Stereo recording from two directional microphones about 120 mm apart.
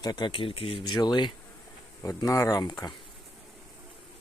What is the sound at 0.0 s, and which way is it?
Speech, 35° left (ahead or behind).